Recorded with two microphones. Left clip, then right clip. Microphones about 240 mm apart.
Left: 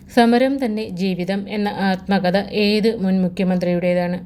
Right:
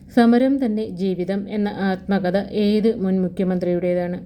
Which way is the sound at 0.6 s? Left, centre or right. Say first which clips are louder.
Left 1 dB; left.